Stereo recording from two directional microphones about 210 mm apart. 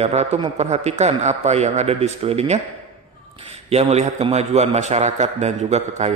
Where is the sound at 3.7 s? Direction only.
30° right (ahead or behind).